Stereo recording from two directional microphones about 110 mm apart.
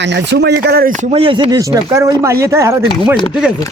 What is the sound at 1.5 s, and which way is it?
Speech, 30° right (ahead or behind).